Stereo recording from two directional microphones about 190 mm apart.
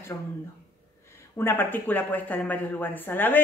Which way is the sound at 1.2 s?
10° left (ahead or behind).